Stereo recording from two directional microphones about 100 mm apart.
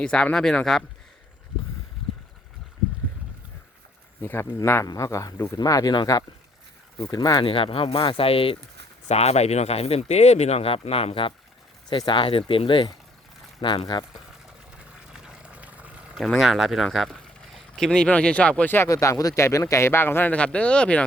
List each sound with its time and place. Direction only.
0.0 s speech: 10° left (ahead or behind)
4.2 s speech: 25° left (ahead or behind)
7.0 s speech: 40° left (ahead or behind)
7.4 s speech: 65° left (ahead or behind)
9.0 s speech: 90° left; by 11.3 s 65° left (ahead or behind)
11.9 s speech: 50° left (ahead or behind)
15.1 s a sound: 10° right (ahead or behind)
16.1 s speech: centre (ahead or behind); by 18.9 s 20° left (ahead or behind)
18.9 s speech: 35° left (ahead or behind); by 21.0 s 10° left (ahead or behind)